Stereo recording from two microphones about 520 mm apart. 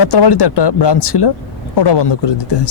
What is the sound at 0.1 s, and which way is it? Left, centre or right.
Speech, left.